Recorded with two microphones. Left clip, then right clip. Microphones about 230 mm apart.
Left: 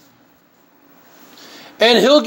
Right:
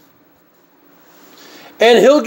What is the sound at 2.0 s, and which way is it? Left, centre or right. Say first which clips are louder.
Speech: right 2 dB; centre.